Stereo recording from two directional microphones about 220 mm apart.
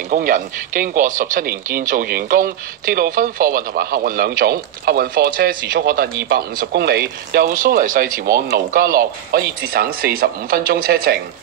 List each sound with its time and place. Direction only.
0.1 s speech: 40° right (ahead or behind)